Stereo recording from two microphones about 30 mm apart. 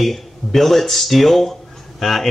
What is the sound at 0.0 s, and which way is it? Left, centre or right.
Speech, centre.